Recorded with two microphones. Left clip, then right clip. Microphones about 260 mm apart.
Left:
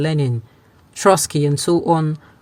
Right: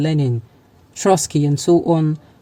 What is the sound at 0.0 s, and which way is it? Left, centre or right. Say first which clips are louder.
Speech: even; left.